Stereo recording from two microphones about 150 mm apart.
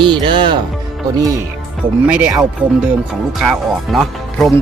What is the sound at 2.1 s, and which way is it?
Speech, 10° right (ahead or behind).